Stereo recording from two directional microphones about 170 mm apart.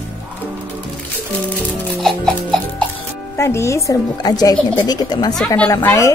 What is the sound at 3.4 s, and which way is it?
Speech, 15° left (ahead or behind).